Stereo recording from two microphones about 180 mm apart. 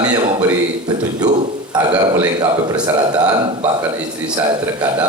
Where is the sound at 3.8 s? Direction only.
20° right (ahead or behind).